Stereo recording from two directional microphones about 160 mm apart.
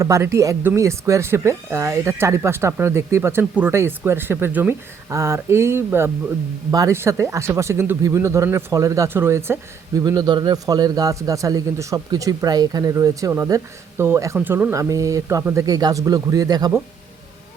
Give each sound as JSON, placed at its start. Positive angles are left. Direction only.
{"t": 0.0, "sound": "speech", "side_deg": -15}